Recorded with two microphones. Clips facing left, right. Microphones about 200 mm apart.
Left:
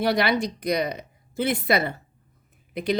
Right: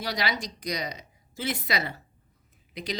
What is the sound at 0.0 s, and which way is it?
A woman's voice, 60° left (ahead or behind).